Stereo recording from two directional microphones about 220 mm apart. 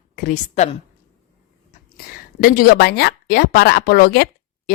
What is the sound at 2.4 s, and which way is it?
Speech, 45° left (ahead or behind).